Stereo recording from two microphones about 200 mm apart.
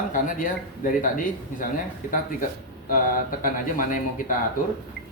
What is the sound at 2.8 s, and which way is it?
Speech, 45° left (ahead or behind).